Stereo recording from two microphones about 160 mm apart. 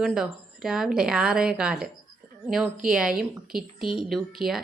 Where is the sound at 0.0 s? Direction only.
5° right (ahead or behind).